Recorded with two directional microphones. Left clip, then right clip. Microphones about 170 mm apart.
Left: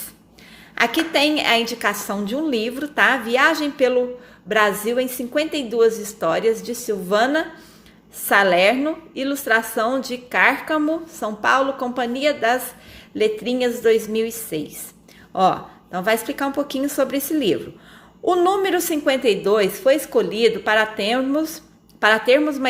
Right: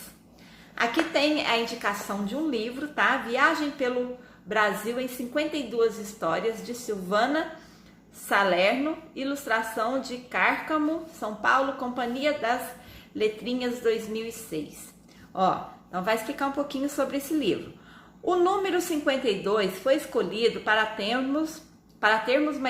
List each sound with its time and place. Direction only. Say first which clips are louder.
0.8 s a woman's voice: left 6 dB; 50° left (ahead or behind)